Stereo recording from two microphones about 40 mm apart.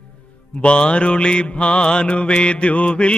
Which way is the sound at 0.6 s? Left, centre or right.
Left.